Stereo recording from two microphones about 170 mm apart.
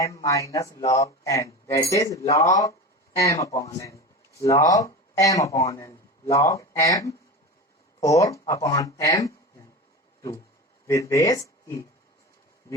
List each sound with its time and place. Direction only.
0.0 s speech: 20° left (ahead or behind)
10.8 s speech: 20° left (ahead or behind)